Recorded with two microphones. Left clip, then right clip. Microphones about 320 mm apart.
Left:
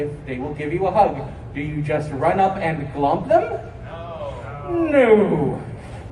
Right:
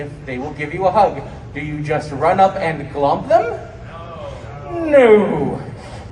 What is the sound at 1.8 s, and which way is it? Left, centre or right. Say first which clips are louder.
A man's voice: right 3 dB; right.